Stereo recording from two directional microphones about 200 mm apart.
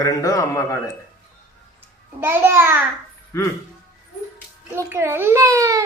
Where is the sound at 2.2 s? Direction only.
10° right (ahead or behind).